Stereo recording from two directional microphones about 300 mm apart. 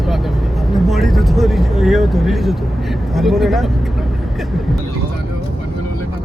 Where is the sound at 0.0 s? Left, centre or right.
Centre.